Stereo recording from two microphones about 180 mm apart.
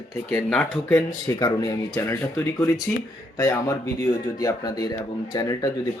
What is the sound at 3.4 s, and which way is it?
A man's voice, 15° left (ahead or behind).